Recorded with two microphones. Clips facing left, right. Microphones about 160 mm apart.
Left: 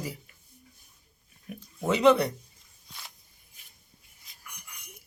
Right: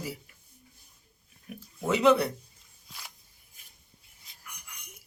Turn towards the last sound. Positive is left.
turn(degrees=-5)  # may be behind; listen again after turning